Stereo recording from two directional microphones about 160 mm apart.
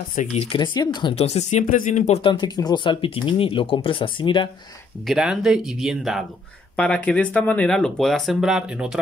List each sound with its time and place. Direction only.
0.1 s speech: 50° left (ahead or behind)
0.4 s speech: 30° left (ahead or behind)
1.2 s speech: 45° left (ahead or behind)
2.2 s speech: 30° left (ahead or behind)
5.0 s speech: 5° right (ahead or behind)